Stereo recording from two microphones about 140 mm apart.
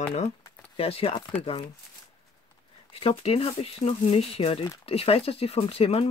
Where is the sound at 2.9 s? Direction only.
45° left (ahead or behind).